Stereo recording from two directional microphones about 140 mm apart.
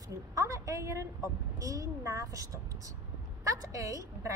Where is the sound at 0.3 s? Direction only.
25° right (ahead or behind).